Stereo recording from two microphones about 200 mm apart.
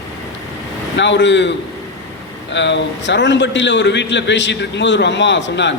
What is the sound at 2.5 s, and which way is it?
A man's voice, 60° left (ahead or behind).